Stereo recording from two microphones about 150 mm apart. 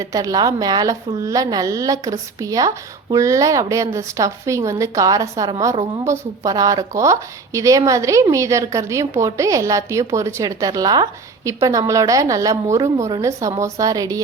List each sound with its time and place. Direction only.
0.0 s a woman's voice: 25° right (ahead or behind)